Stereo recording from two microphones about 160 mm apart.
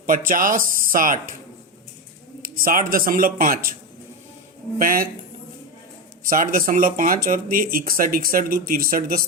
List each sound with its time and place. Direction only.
0.0 s speech: 60° right (ahead or behind)
2.4 s speech: 60° right (ahead or behind)
4.8 s speech: 60° right (ahead or behind)
6.2 s speech: 60° right (ahead or behind)